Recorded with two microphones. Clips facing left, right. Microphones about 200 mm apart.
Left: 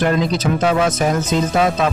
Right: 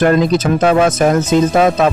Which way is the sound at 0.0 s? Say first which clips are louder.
Right 5 dB; 50° right (ahead or behind).